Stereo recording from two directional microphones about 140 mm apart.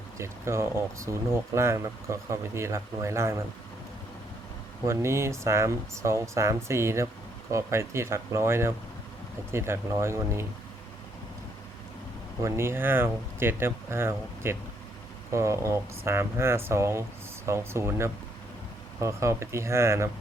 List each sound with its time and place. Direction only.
0.2 s speech: 20° right (ahead or behind)
4.9 s speech: 20° right (ahead or behind)
12.4 s speech: 20° right (ahead or behind)